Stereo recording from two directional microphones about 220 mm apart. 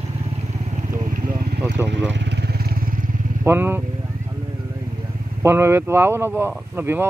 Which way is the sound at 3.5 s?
10° right (ahead or behind).